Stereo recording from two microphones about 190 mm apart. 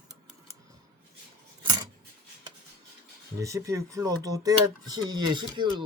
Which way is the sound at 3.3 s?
15° right (ahead or behind).